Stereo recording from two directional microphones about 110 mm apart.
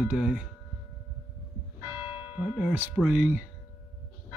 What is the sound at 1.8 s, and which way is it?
Church bell, 20° right (ahead or behind).